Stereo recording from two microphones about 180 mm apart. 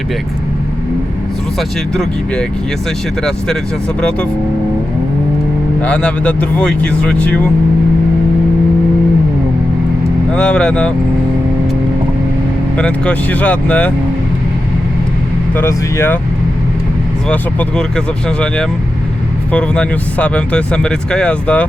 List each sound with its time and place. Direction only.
5.8 s speech: 5° left (ahead or behind)
10.3 s speech: 5° left (ahead or behind)
12.7 s speech: 5° left (ahead or behind)
15.5 s speech: 10° left (ahead or behind)
17.2 s speech: 5° left (ahead or behind)